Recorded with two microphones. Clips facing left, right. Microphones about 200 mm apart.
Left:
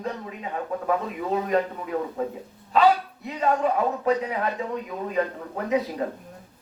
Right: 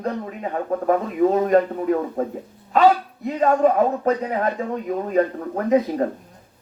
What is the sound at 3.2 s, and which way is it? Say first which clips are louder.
A man's voice: right 6 dB; 45° right (ahead or behind).